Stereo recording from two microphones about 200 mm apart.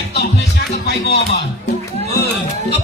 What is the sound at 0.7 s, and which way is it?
Music, 55° left (ahead or behind).